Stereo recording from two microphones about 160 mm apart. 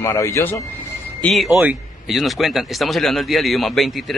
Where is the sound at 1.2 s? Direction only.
Centre (ahead or behind).